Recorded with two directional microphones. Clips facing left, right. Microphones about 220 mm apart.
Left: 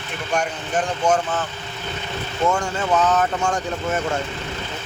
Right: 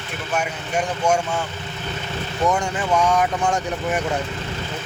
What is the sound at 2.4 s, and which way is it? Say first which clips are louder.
Speech: even; 15° right (ahead or behind).